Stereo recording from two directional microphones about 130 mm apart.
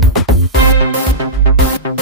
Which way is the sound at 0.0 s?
Centre (ahead or behind).